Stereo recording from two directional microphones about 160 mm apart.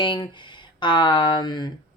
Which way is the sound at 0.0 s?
30° left (ahead or behind).